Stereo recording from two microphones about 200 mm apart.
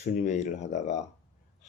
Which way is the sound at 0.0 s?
35° left (ahead or behind).